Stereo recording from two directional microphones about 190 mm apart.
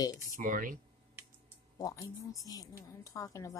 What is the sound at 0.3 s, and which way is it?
Speech, 45° right (ahead or behind).